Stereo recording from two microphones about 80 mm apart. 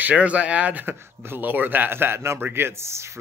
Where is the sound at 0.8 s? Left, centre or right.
Right.